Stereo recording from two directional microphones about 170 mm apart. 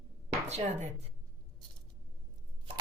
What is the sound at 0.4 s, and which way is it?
Speech, 40° right (ahead or behind).